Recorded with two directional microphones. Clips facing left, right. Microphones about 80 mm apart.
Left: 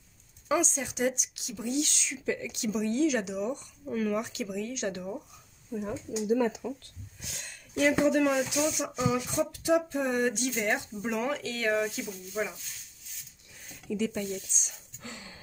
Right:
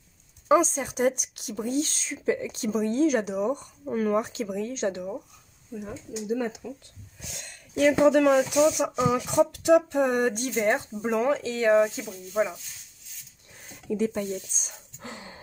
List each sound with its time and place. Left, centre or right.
0.5 s speech: right
4.9 s speech: centre
6.6 s speech: left
8.1 s speech: right
8.4 s speech: right
13.7 s speech: right